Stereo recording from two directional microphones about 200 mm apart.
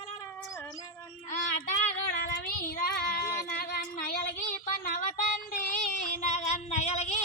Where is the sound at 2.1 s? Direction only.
50° left (ahead or behind).